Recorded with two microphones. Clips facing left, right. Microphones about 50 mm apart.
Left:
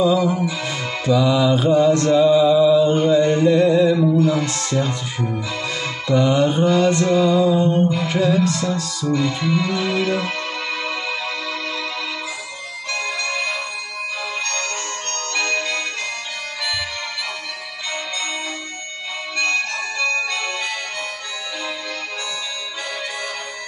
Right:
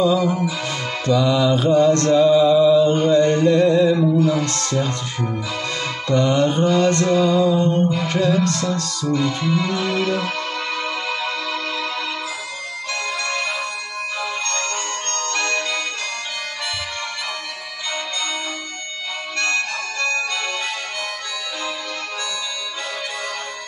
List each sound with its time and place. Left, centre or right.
0.0 s music: centre
1.0 s mantra: centre
6.0 s mantra: centre
8.1 s music: centre
15.4 s music: centre
20.0 s music: centre